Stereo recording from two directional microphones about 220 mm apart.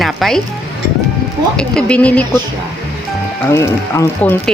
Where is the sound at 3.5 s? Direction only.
15° left (ahead or behind).